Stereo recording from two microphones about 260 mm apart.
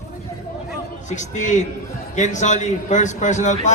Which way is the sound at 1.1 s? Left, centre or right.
Left.